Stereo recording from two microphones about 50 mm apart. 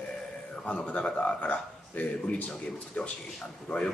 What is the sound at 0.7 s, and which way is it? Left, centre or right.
A man's voice, left.